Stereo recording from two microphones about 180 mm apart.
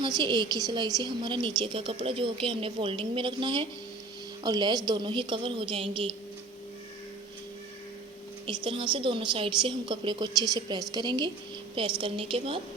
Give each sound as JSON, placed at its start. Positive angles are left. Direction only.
{"t": 0.0, "sound": "a woman's voice", "side_deg": -25}
{"t": 8.4, "sound": "a woman's voice", "side_deg": -25}